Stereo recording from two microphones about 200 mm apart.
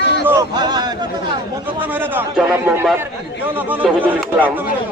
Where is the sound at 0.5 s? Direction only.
20° right (ahead or behind).